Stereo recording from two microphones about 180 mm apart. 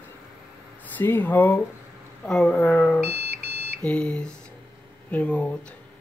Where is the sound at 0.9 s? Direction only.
10° left (ahead or behind).